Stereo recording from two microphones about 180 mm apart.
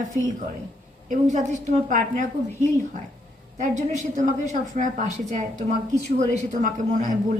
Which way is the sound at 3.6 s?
40° right (ahead or behind).